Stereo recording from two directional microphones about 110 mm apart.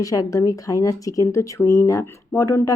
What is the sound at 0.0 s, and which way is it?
Speech, 30° left (ahead or behind).